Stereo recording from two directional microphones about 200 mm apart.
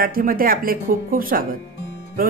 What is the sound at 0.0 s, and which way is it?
Speech, 45° right (ahead or behind).